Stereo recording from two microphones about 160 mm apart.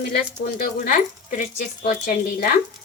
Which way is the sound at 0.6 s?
60° left (ahead or behind).